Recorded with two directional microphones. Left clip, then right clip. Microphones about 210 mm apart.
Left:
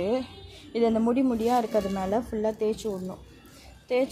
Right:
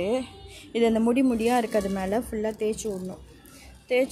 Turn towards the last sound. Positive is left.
turn(degrees=0)  # may be behind; listen again after turning